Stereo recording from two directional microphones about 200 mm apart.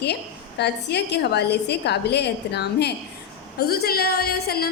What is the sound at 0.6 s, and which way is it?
A woman's voice, 55° left (ahead or behind).